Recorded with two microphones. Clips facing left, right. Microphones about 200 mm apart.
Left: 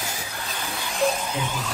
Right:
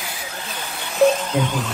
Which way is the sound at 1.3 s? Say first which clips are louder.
Right 8 dB; 60° right (ahead or behind).